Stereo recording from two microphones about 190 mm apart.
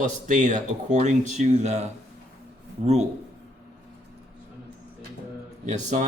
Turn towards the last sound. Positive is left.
turn(degrees=-40)  # may be behind; listen again after turning